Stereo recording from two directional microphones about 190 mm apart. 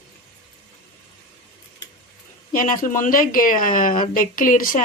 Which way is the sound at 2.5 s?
45° left (ahead or behind).